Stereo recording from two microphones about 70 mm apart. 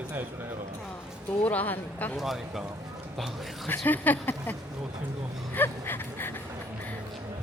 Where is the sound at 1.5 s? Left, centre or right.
Left.